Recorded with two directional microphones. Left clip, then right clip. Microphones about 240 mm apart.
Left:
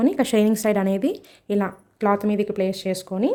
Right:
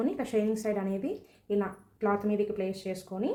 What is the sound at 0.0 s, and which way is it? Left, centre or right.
A woman's voice, left.